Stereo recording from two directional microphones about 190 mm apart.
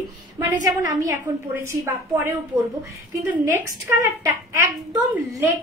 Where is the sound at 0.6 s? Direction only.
20° right (ahead or behind).